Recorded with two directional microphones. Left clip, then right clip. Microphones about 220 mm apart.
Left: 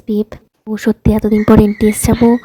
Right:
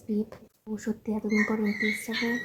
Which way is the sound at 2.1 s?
55° left (ahead or behind).